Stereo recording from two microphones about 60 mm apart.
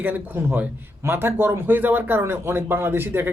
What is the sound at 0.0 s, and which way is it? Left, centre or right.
Speech, right.